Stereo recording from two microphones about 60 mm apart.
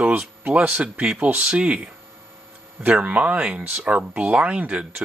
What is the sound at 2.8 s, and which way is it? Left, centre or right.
Speech, right.